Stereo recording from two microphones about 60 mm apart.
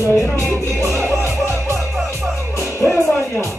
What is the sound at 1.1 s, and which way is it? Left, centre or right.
Music, right.